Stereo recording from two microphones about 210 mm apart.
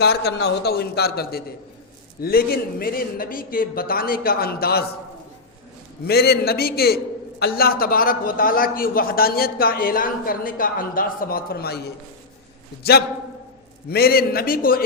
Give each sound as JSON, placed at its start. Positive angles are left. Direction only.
{"t": 0.0, "sound": "a man's voice", "side_deg": 50}
{"t": 6.1, "sound": "a man's voice", "side_deg": 50}
{"t": 13.9, "sound": "a man's voice", "side_deg": 45}